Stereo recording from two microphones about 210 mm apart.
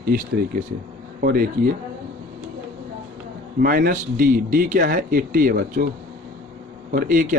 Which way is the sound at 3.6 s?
40° right (ahead or behind).